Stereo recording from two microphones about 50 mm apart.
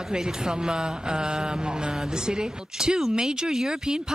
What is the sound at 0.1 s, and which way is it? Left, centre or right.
Speech, centre.